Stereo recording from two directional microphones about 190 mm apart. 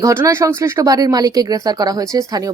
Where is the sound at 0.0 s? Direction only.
15° right (ahead or behind).